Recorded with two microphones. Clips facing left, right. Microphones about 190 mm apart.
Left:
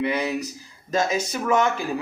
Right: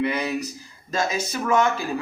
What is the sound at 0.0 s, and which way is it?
Speech, 15° left (ahead or behind).